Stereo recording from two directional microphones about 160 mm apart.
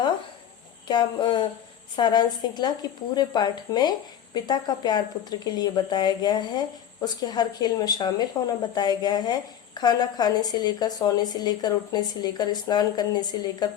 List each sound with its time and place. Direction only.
0.9 s a woman's voice: 30° left (ahead or behind)